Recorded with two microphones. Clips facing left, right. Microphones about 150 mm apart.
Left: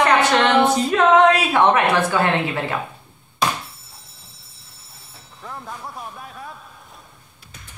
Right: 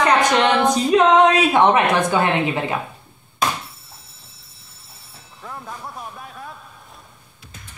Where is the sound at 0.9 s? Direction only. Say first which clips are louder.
Right 1 dB; 20° right (ahead or behind).